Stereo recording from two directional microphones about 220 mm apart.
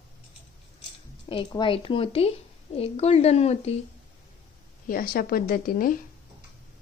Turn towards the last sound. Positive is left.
turn(degrees=40)  # may be behind; listen again after turning